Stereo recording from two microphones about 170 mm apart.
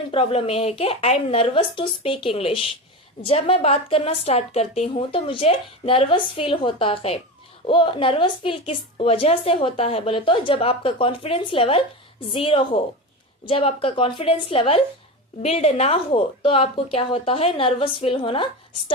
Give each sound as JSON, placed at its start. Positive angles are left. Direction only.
{"t": 0.1, "sound": "a woman's voice", "side_deg": 35}